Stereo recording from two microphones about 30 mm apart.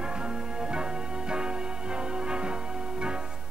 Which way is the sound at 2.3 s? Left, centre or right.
Right.